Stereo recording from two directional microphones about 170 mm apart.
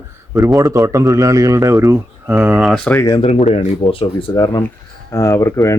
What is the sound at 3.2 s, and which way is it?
Speech, 35° left (ahead or behind).